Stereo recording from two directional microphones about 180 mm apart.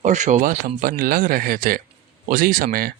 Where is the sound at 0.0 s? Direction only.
40° right (ahead or behind).